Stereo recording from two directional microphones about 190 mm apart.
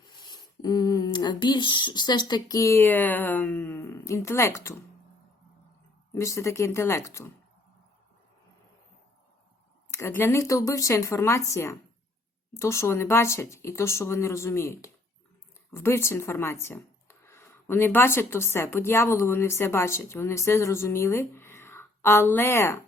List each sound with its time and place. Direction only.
0.0 s speech: 25° left (ahead or behind)
6.1 s speech: 15° left (ahead or behind)
9.9 s speech: 15° left (ahead or behind)